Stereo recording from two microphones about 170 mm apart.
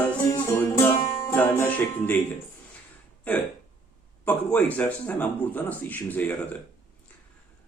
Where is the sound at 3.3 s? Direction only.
10° left (ahead or behind).